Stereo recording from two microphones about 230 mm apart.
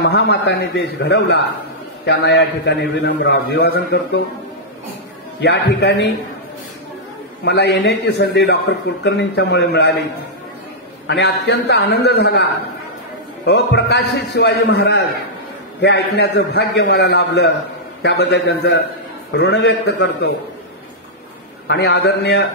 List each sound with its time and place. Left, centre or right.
0.0 s a man's voice: left
5.4 s a man's voice: left
7.4 s a man's voice: left
11.1 s a man's voice: left
13.5 s a man's voice: left
21.6 s a man's voice: left